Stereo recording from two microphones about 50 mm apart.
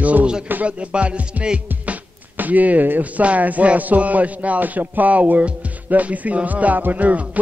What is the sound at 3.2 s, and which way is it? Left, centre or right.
A man's voice, right.